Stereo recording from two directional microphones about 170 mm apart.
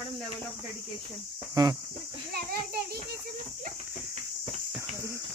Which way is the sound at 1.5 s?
25° right (ahead or behind).